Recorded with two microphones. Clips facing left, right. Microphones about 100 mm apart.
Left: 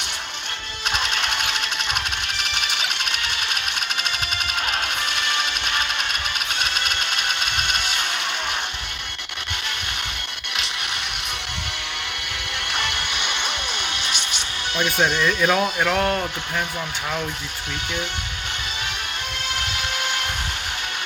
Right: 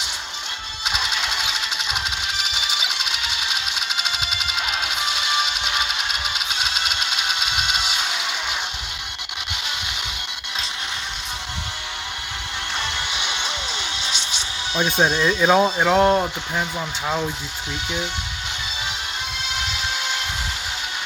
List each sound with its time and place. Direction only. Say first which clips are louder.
0.9 s music: left 1 dB; 15° right (ahead or behind)
1.3 s sewing machine: left 1 dB; 60° left (ahead or behind)
2.0 s a sound: even; 60° left (ahead or behind)
4.6 s music: right 1 dB; 55° left (ahead or behind)
5.9 s a sound: even; 60° left (ahead or behind)
12.8 s music: even; 55° left (ahead or behind)
14.8 s speech: right 2 dB; 20° right (ahead or behind)